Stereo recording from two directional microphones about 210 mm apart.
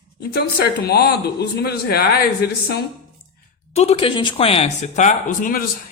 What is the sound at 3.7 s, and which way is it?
Speech, 30° left (ahead or behind).